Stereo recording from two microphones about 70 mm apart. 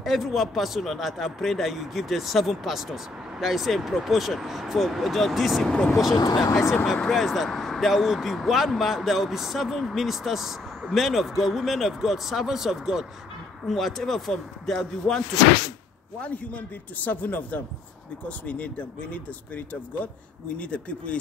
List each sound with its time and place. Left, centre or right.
0.0 s speech: centre
6.1 s speech: left
7.0 s speech: centre
16.2 s speech: left